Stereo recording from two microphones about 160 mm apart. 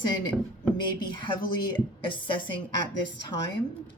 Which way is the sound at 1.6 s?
30° left (ahead or behind).